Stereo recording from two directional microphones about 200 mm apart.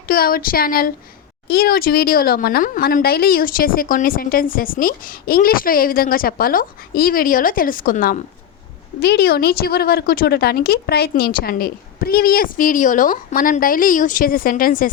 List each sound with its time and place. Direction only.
0.1 s speech: 45° left (ahead or behind)
9.0 s speech: 55° left (ahead or behind)